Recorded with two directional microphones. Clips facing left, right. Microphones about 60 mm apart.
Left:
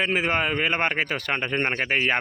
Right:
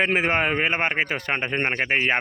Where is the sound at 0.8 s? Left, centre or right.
Centre.